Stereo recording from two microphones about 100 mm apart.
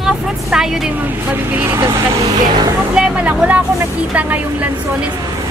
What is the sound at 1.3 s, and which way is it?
Speech, 20° right (ahead or behind).